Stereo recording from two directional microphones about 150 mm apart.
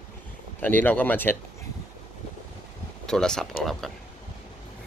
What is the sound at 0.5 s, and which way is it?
Speech, 10° left (ahead or behind).